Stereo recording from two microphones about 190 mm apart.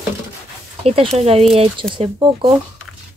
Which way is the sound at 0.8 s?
30° right (ahead or behind).